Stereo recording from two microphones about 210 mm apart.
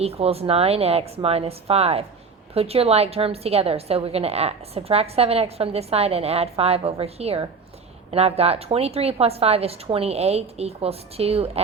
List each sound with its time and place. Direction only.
0.0 s a woman's voice: 30° right (ahead or behind)